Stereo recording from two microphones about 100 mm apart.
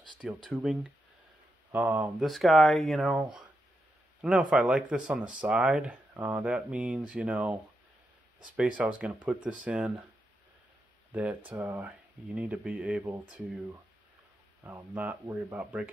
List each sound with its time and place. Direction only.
0.5 s speech: 10° right (ahead or behind)
2.2 s speech: centre (ahead or behind)
4.2 s speech: 10° right (ahead or behind)
8.5 s speech: 10° right (ahead or behind)
11.1 s speech: 15° right (ahead or behind)
14.6 s speech: 15° right (ahead or behind)